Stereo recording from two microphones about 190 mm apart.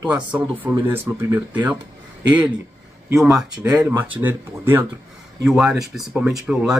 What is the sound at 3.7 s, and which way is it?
Speech, 15° right (ahead or behind).